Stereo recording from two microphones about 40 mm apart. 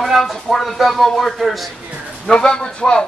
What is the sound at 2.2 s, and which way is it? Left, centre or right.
Speech, left.